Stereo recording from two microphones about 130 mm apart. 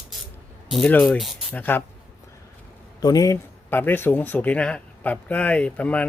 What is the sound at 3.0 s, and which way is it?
Speech, 30° left (ahead or behind).